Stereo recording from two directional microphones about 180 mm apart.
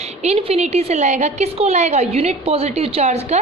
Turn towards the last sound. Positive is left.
turn(degrees=-40)  # may be behind; listen again after turning